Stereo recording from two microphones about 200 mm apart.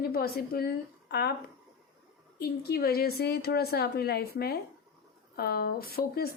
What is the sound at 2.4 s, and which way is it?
A woman's voice, 50° left (ahead or behind).